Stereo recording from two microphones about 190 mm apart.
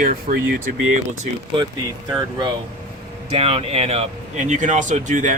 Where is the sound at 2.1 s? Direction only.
20° right (ahead or behind).